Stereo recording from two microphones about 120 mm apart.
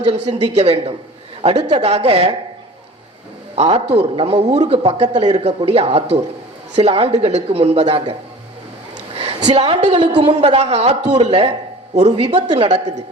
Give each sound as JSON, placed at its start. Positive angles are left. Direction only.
{"t": 0.0, "sound": "speech", "side_deg": -65}
{"t": 3.5, "sound": "speech", "side_deg": -60}
{"t": 9.1, "sound": "a woman's voice", "side_deg": -60}
{"t": 10.3, "sound": "speech", "side_deg": -60}